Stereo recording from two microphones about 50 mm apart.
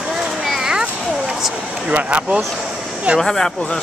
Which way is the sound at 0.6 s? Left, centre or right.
Centre.